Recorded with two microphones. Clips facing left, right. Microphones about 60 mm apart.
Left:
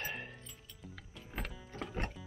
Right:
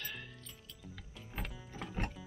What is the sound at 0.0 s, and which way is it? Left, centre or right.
Music, left.